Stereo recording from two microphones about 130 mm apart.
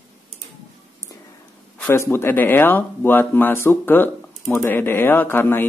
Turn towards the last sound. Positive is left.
turn(degrees=15)  # may be behind; listen again after turning